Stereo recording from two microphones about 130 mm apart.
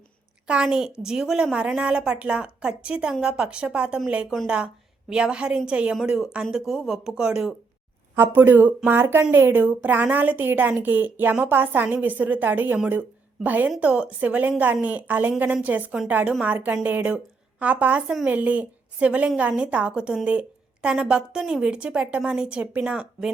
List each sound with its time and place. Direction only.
0.4 s a woman's voice: 10° right (ahead or behind)
8.1 s a woman's voice: 15° right (ahead or behind)